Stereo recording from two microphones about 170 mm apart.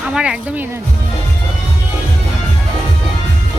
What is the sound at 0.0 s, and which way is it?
Speech, 5° right (ahead or behind).